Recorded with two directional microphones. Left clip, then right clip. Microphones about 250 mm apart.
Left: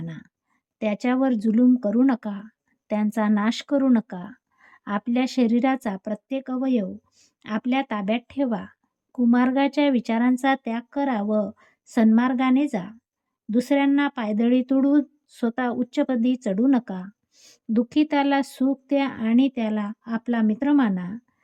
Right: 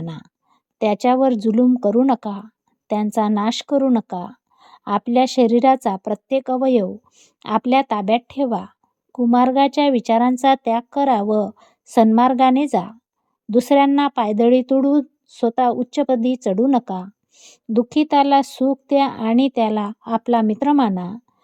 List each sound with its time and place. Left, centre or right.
0.8 s speech: centre
11.5 s a sound: right
11.9 s speech: centre